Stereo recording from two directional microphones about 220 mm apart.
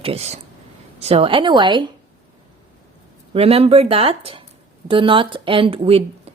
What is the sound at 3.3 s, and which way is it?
A woman's voice, 25° right (ahead or behind).